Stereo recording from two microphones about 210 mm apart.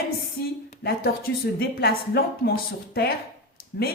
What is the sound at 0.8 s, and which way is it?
A woman's voice, 45° left (ahead or behind).